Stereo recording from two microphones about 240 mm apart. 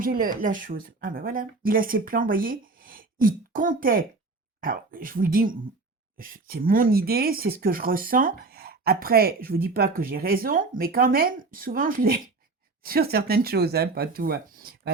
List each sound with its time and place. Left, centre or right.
0.0 s speech: right